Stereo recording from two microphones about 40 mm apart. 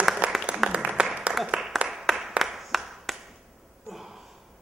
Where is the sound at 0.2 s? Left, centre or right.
Right.